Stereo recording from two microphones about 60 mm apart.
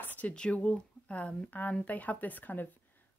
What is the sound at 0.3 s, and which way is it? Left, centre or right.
Speech, centre.